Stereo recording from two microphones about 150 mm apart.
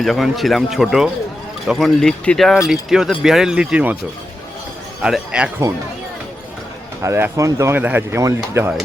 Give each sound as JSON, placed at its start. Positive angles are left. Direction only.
{"t": 0.0, "sound": "a man's voice", "side_deg": 0}
{"t": 5.0, "sound": "a man's voice", "side_deg": -5}
{"t": 7.0, "sound": "speech", "side_deg": -20}